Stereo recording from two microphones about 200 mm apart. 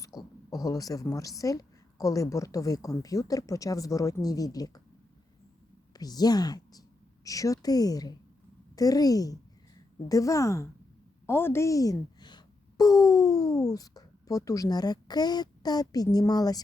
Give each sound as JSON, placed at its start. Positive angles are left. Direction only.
{"t": 0.0, "sound": "a woman's voice", "side_deg": 20}
{"t": 5.9, "sound": "a woman's voice", "side_deg": 20}